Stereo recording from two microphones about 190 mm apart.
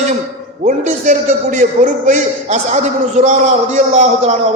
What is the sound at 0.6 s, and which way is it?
A man's voice, 45° right (ahead or behind).